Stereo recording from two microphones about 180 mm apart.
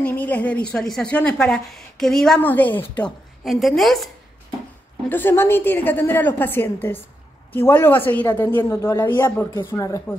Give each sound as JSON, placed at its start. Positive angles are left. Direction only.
{"t": 0.0, "sound": "a woman's voice", "side_deg": 10}
{"t": 5.1, "sound": "a woman's voice", "side_deg": 10}
{"t": 9.0, "sound": "a woman's voice", "side_deg": 25}